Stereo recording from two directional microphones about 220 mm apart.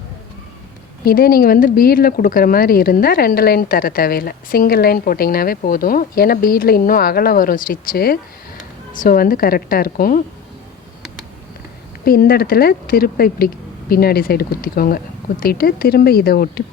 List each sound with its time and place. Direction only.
1.0 s a woman's voice: 40° left (ahead or behind)
12.0 s speech: 40° left (ahead or behind)